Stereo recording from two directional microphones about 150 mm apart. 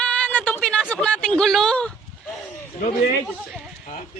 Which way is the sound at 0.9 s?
10° left (ahead or behind).